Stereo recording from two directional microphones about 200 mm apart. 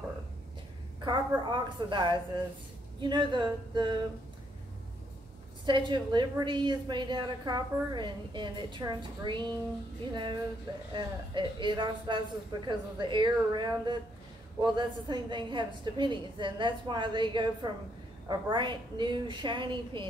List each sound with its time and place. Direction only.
1.0 s a woman's voice: 25° right (ahead or behind)
5.7 s a woman's voice: 20° right (ahead or behind)
10.9 s a woman's voice: 25° right (ahead or behind)